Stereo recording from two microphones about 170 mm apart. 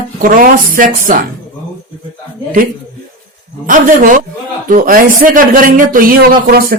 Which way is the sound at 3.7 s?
50° right (ahead or behind).